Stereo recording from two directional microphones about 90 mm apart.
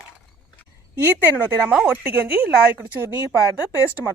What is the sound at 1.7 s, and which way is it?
Speech, 10° right (ahead or behind).